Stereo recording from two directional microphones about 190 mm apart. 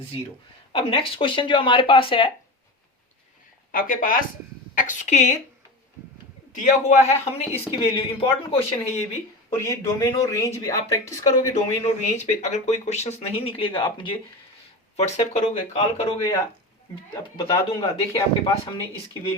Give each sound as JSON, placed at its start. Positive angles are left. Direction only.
{"t": 0.7, "sound": "speech", "side_deg": 30}
{"t": 3.7, "sound": "speech", "side_deg": 45}
{"t": 6.5, "sound": "speech", "side_deg": 40}
{"t": 9.6, "sound": "speech", "side_deg": 15}
{"t": 11.5, "sound": "speech", "side_deg": 40}
{"t": 17.3, "sound": "speech", "side_deg": 30}